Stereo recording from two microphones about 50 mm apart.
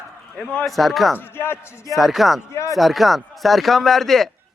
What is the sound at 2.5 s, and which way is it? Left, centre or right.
Speech, left.